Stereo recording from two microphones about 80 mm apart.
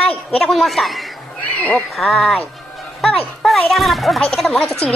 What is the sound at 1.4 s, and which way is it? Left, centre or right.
Speech, centre.